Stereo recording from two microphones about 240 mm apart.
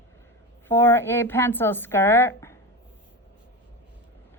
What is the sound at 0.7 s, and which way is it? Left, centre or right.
A woman's voice, centre.